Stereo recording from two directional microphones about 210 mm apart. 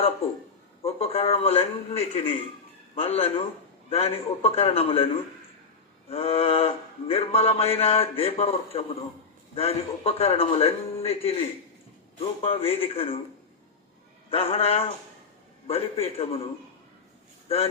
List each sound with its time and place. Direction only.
0.8 s speech: 30° left (ahead or behind)
6.1 s speech: 25° left (ahead or behind)
14.3 s speech: 25° left (ahead or behind)